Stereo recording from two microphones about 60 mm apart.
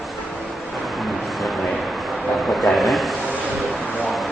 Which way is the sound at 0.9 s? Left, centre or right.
Centre.